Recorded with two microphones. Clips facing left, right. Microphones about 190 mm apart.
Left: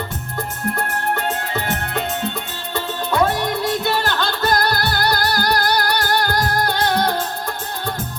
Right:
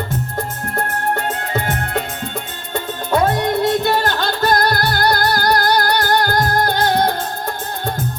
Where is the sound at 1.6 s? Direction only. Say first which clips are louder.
Right 1 dB; 45° right (ahead or behind).